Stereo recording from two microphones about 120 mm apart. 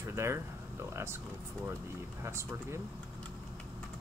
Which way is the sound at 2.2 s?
20° right (ahead or behind).